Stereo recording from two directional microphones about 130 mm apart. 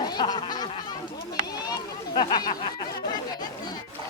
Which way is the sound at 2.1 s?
35° left (ahead or behind).